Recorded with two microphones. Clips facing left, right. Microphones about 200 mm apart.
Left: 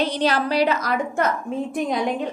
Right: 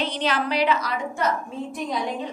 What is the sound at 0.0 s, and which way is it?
A woman's voice, 40° left (ahead or behind).